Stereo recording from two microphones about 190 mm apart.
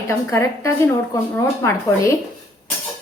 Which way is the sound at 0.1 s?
15° left (ahead or behind).